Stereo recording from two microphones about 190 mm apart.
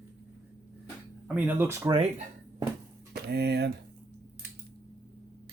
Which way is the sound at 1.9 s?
30° right (ahead or behind).